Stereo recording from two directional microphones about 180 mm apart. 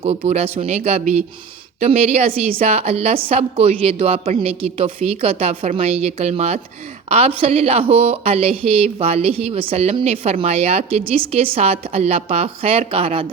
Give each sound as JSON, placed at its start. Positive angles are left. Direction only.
{"t": 0.0, "sound": "a woman's voice", "side_deg": -35}